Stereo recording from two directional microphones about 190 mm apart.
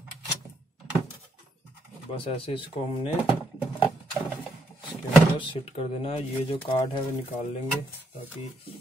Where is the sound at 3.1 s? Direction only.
5° right (ahead or behind).